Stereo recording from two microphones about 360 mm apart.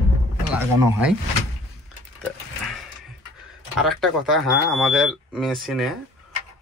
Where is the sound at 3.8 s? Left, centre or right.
Centre.